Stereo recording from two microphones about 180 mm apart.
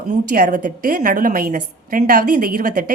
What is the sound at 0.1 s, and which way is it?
A woman's voice, 45° right (ahead or behind).